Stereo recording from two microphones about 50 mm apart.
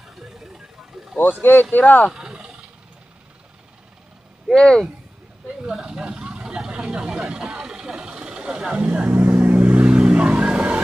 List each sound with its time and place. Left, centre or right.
0.2 s a sound: centre
1.4 s speech: left
2.1 s wild animals: centre
4.5 s speech: centre
5.8 s vehicle: centre
8.8 s speech: right
9.2 s vehicle: right